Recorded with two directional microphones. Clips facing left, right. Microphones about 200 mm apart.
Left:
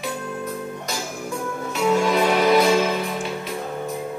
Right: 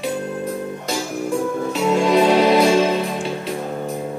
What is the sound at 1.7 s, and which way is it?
Music, 30° right (ahead or behind).